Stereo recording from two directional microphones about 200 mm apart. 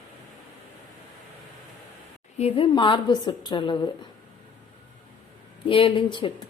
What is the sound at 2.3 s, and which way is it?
A woman's voice, 30° left (ahead or behind).